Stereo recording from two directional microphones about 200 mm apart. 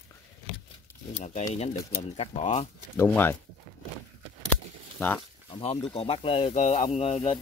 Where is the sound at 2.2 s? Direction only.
30° left (ahead or behind).